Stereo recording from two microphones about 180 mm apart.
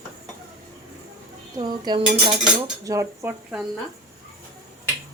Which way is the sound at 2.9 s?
15° right (ahead or behind).